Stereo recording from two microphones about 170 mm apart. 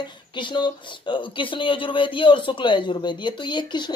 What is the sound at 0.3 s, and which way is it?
A woman's voice, 25° left (ahead or behind).